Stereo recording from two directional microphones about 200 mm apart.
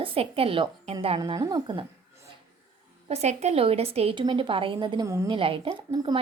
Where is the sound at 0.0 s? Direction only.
30° right (ahead or behind).